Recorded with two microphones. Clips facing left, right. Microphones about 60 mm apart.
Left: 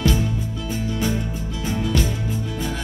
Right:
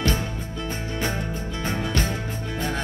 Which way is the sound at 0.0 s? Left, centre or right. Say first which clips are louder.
Left 4 dB; right.